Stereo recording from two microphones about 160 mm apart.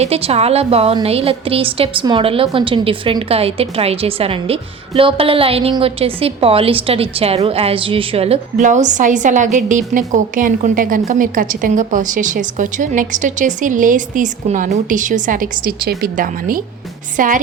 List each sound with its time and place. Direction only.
0.0 s a woman's voice: 40° right (ahead or behind); by 17.4 s 55° right (ahead or behind)